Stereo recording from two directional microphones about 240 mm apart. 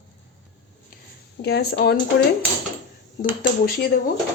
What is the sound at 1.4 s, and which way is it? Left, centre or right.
Speech, left.